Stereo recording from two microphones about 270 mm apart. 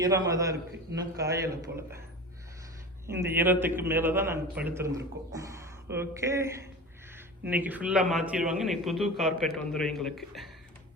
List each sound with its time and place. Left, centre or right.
0.0 s a man's voice: centre
3.1 s a man's voice: centre